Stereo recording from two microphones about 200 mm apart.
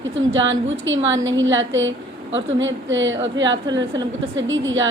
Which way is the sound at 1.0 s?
70° right (ahead or behind).